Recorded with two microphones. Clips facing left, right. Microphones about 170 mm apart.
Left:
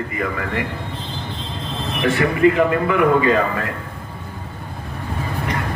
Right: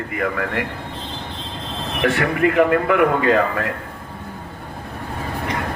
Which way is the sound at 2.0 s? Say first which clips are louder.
Left 2 dB; 60° right (ahead or behind).